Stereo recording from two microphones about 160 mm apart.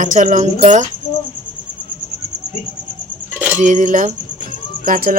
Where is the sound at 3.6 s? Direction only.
50° right (ahead or behind).